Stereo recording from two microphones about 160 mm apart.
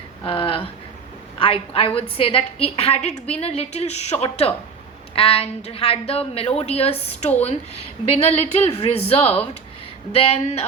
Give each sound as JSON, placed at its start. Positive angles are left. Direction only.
{"t": 0.3, "sound": "a woman's voice", "side_deg": 35}